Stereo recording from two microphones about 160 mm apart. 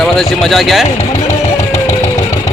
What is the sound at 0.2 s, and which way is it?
Speech, centre (ahead or behind).